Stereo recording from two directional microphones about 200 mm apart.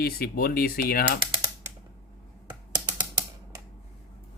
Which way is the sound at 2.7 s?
20° right (ahead or behind).